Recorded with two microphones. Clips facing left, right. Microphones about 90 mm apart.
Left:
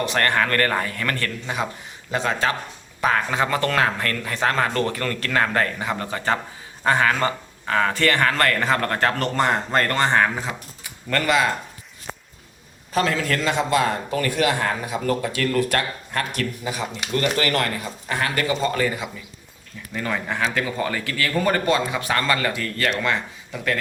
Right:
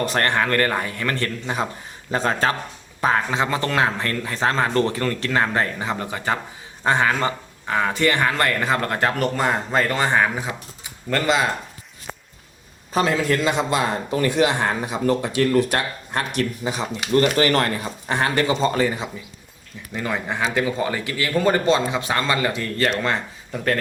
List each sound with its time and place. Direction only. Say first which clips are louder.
0.0 s a man's voice: even; 30° right (ahead or behind)
3.2 s a man's voice: even; 20° right (ahead or behind); by 10.2 s 5° right (ahead or behind)
11.1 s a man's voice: even; 25° right (ahead or behind)
12.9 s a man's voice: right 2 dB; 20° right (ahead or behind); by 23.8 s 40° right (ahead or behind)